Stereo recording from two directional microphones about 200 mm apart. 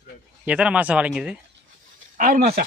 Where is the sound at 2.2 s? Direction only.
45° right (ahead or behind).